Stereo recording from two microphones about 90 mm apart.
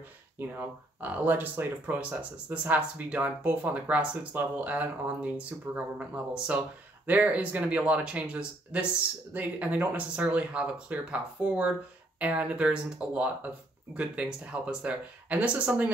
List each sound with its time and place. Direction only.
0.4 s speech: 20° right (ahead or behind)